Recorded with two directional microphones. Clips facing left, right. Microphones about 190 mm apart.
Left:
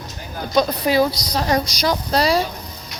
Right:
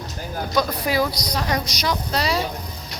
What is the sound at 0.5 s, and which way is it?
A woman's voice, 25° left (ahead or behind).